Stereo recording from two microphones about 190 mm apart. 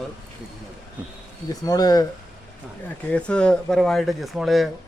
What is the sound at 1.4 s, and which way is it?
Speech, 20° left (ahead or behind).